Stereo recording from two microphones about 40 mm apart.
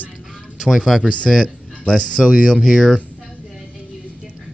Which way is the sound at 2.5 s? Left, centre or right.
Centre.